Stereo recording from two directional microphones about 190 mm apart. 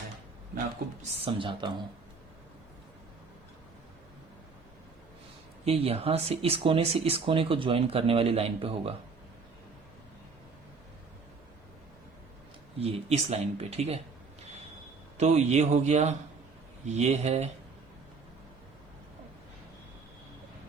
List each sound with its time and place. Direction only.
1.2 s speech: 25° right (ahead or behind)
5.6 s speech: 30° right (ahead or behind)
12.8 s speech: 35° right (ahead or behind)
15.2 s speech: 35° right (ahead or behind)